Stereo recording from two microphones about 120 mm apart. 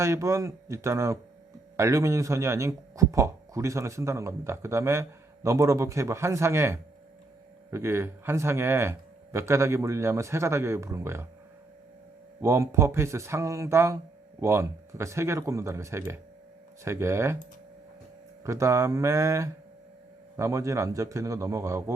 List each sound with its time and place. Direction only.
0.0 s speech: 25° right (ahead or behind)
12.4 s speech: 25° right (ahead or behind)
18.4 s speech: 25° right (ahead or behind)